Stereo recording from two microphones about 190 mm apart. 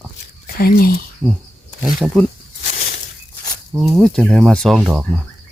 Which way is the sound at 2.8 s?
55° left (ahead or behind).